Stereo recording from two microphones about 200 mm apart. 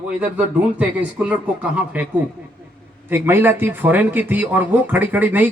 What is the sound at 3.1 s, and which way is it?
A man's voice, 10° right (ahead or behind).